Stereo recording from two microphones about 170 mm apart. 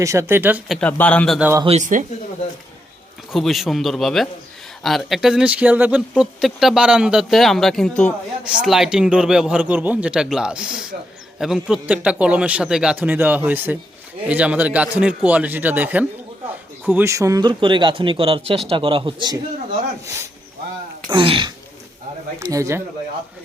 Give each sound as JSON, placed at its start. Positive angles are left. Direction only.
{"t": 0.0, "sound": "a man's voice", "side_deg": -15}
{"t": 0.8, "sound": "a man's voice", "side_deg": 10}
{"t": 1.4, "sound": "a man's voice", "side_deg": -10}
{"t": 1.6, "sound": "speech", "side_deg": -40}
{"t": 3.3, "sound": "a man's voice", "side_deg": 0}
{"t": 21.1, "sound": "speech", "side_deg": -30}
{"t": 22.5, "sound": "a man's voice", "side_deg": -15}